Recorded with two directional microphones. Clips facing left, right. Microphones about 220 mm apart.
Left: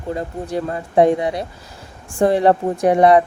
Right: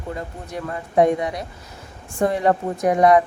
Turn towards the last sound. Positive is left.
turn(degrees=30)  # may be behind; listen again after turning